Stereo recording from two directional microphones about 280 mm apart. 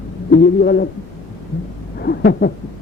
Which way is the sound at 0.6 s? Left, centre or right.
Left.